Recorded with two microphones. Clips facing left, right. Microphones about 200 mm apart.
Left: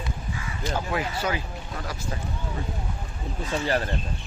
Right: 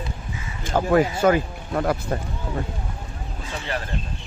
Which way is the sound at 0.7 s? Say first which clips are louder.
Right 10 dB; 50° right (ahead or behind).